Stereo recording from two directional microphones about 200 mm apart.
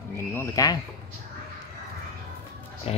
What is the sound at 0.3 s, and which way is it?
Speech, 15° left (ahead or behind).